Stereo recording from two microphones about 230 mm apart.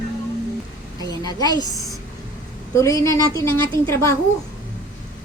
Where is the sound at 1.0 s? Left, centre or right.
Centre.